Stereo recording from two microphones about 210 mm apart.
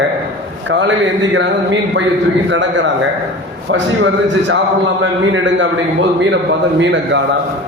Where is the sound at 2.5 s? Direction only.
60° right (ahead or behind).